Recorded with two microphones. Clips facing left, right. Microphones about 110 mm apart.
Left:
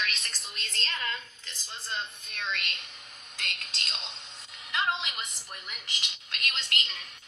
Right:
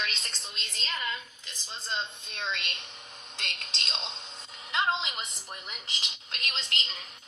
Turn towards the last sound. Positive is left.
turn(degrees=-25)  # may be behind; listen again after turning